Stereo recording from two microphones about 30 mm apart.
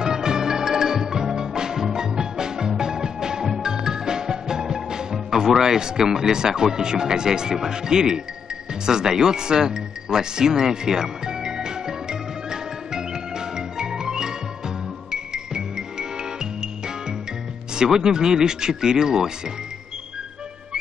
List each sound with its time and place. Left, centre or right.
0.0 s music: right
5.6 s speech: right
8.8 s music: right
17.8 s speech: right